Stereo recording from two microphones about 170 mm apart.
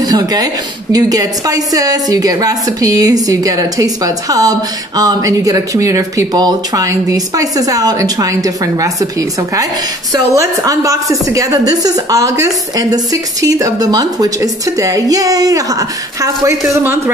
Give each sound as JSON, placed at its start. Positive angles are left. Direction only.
{"t": 0.0, "sound": "a woman's voice", "side_deg": -20}
{"t": 10.3, "sound": "a woman's voice", "side_deg": -20}